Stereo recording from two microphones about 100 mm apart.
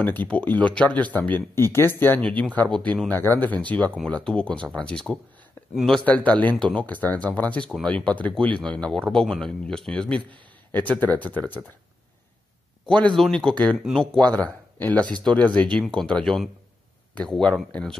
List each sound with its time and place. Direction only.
0.0 s speech: 15° left (ahead or behind)
12.8 s speech: 10° left (ahead or behind)
14.2 s speech: 15° left (ahead or behind)